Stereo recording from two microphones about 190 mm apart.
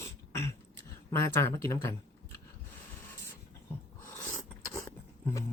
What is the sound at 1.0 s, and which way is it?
Speech, 15° left (ahead or behind).